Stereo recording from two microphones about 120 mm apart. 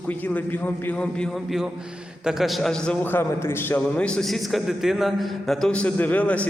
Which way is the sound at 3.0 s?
20° left (ahead or behind).